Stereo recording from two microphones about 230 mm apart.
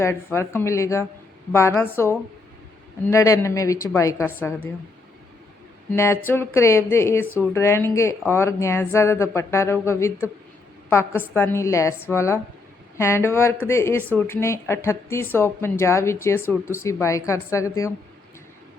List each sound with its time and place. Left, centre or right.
0.0 s a woman's voice: centre
5.9 s a woman's voice: centre